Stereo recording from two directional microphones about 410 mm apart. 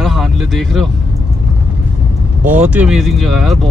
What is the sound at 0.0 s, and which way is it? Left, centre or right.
Speech, centre.